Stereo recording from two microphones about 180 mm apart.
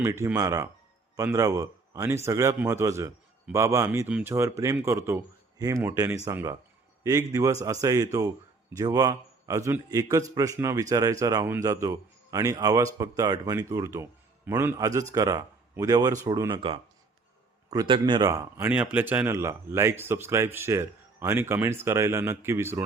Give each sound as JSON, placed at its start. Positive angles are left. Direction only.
{"t": 0.0, "sound": "a man's voice", "side_deg": -15}